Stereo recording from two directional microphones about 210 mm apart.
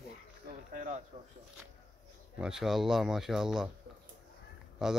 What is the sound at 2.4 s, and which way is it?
Speech, centre (ahead or behind).